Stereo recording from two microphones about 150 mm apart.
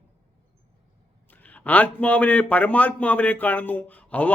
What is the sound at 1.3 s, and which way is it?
A man's voice, 10° left (ahead or behind).